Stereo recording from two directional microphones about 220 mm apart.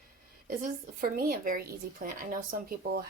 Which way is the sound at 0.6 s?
40° right (ahead or behind).